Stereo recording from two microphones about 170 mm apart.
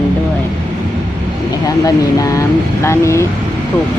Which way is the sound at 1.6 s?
20° left (ahead or behind).